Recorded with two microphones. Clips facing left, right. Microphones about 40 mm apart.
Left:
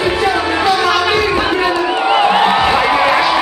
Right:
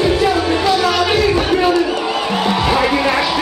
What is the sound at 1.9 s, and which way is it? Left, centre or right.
Music, left.